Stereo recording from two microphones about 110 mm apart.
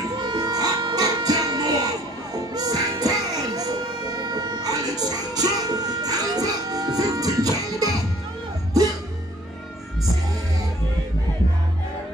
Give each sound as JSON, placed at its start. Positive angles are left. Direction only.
{"t": 0.2, "sound": "music", "side_deg": -35}